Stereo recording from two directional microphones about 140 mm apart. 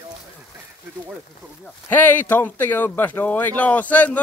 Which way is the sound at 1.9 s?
10° left (ahead or behind).